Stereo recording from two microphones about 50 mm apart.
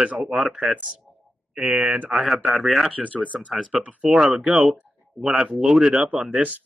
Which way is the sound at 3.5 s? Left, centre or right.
Centre.